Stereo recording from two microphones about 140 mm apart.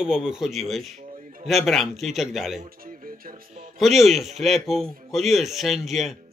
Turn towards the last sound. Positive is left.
turn(degrees=0)  # may be behind; listen again after turning